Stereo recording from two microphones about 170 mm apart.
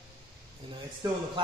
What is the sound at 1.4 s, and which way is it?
Speech, 25° right (ahead or behind).